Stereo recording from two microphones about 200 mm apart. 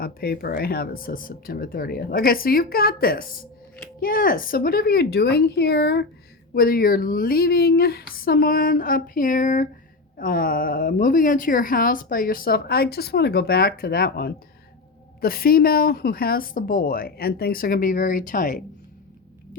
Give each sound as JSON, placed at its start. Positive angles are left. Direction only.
{"t": 0.0, "sound": "speech", "side_deg": 50}